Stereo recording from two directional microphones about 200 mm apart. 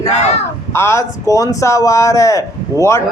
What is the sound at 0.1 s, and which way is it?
Speech, 35° left (ahead or behind).